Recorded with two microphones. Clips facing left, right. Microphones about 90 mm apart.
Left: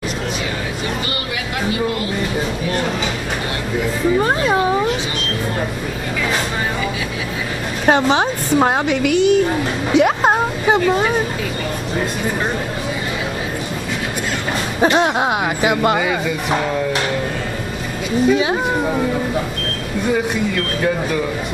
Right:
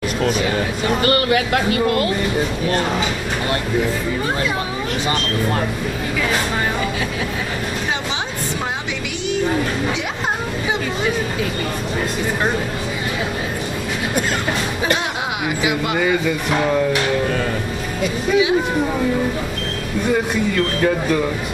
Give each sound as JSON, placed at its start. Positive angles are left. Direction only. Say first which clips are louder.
{"t": 1.0, "sound": "speech", "louder": "right 8 dB", "side_deg": -55}
{"t": 7.8, "sound": "a woman's voice", "louder": "left 9 dB", "side_deg": 50}
{"t": 14.8, "sound": "a woman's voice", "louder": "left 6 dB", "side_deg": 40}